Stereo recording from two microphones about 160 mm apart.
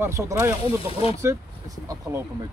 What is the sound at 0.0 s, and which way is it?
Speech, 15° right (ahead or behind).